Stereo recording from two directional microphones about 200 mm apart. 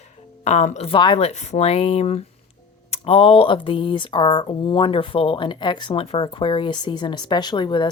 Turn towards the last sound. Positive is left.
turn(degrees=25)  # may be behind; listen again after turning